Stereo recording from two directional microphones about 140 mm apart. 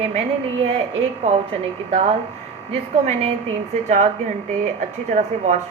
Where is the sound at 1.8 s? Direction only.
50° right (ahead or behind).